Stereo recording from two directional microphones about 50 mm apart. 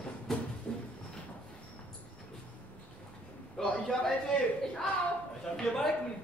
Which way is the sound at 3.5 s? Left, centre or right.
Centre.